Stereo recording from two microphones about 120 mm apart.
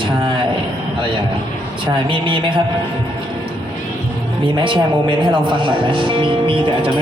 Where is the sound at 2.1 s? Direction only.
45° right (ahead or behind).